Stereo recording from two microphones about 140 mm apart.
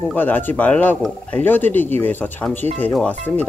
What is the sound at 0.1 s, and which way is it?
Speech, 15° left (ahead or behind).